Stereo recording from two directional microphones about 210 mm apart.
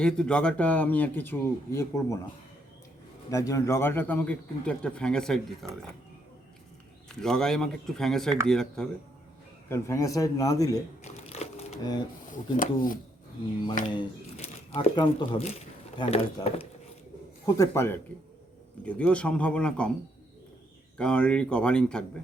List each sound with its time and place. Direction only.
0.0 s a man's voice: 5° left (ahead or behind)
3.2 s a man's voice: 15° left (ahead or behind)
7.2 s speech: 5° left (ahead or behind)
9.6 s a man's voice: 15° left (ahead or behind)
11.0 s a sound: 30° left (ahead or behind)
12.5 s speech: 40° left (ahead or behind)
13.9 s speech: 20° left (ahead or behind)
17.4 s a man's voice: 15° left (ahead or behind)
21.0 s speech: 5° left (ahead or behind)